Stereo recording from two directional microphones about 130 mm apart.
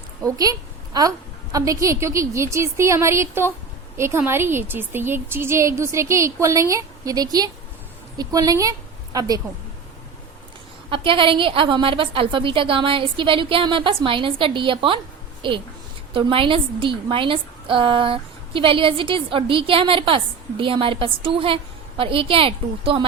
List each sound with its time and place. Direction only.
0.2 s a woman's voice: 25° right (ahead or behind)
1.5 s a woman's voice: 25° right (ahead or behind)
10.9 s a woman's voice: 40° right (ahead or behind)